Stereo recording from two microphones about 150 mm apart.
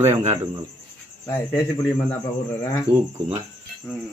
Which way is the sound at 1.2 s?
20° left (ahead or behind).